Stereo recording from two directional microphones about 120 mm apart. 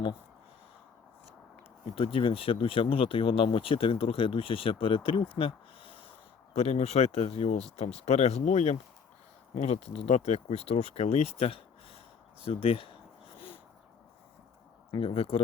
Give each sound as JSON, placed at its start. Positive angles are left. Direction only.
{"t": 2.1, "sound": "speech", "side_deg": 50}
{"t": 12.5, "sound": "a sound", "side_deg": 50}
{"t": 15.0, "sound": "speech", "side_deg": 55}